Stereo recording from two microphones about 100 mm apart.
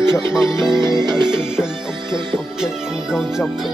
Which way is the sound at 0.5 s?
50° right (ahead or behind).